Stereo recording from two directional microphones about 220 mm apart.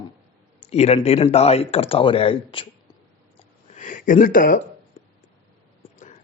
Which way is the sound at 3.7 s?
35° left (ahead or behind).